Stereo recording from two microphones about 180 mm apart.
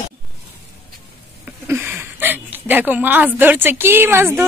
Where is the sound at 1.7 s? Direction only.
10° right (ahead or behind).